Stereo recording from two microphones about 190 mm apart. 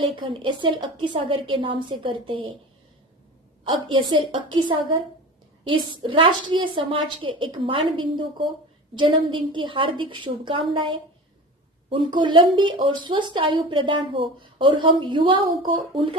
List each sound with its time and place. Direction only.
0.0 s a woman's voice: 25° right (ahead or behind)
3.6 s a woman's voice: 25° right (ahead or behind)
5.6 s a woman's voice: 25° right (ahead or behind)